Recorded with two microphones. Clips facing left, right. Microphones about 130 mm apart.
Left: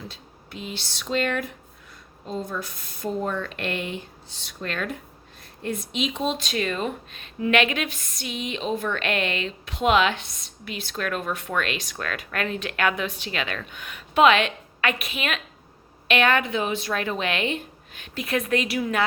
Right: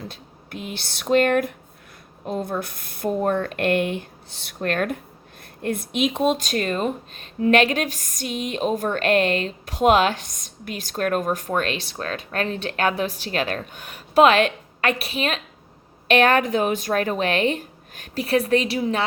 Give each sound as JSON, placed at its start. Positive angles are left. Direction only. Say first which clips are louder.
{"t": 0.1, "sound": "speech", "louder": "right 4 dB", "side_deg": -55}